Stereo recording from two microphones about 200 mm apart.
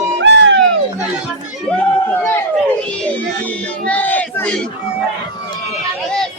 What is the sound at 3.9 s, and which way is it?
Battle cry, 10° left (ahead or behind).